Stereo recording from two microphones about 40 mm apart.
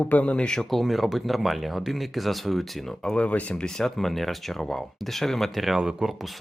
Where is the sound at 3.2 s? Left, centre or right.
Left.